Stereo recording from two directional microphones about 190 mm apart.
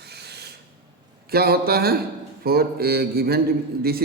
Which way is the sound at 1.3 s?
55° right (ahead or behind).